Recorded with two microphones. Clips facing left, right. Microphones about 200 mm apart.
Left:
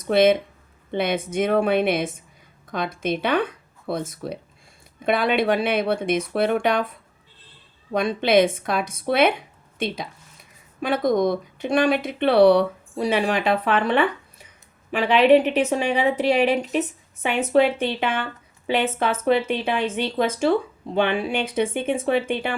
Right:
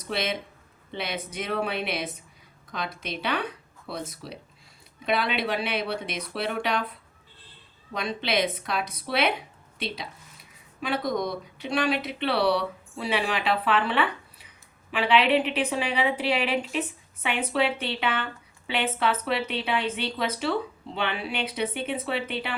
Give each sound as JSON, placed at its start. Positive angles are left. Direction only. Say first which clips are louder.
{"t": 0.1, "sound": "speech", "louder": "left 13 dB", "side_deg": 50}
{"t": 7.9, "sound": "speech", "louder": "left 9 dB", "side_deg": 50}